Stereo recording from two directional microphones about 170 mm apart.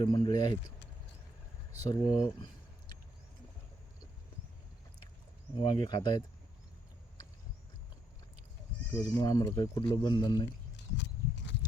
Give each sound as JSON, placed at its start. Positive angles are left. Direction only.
{"t": 0.0, "sound": "speech", "side_deg": 25}
{"t": 1.8, "sound": "speech", "side_deg": 20}
{"t": 5.5, "sound": "speech", "side_deg": 30}
{"t": 8.9, "sound": "speech", "side_deg": 20}
{"t": 10.9, "sound": "horse", "side_deg": 90}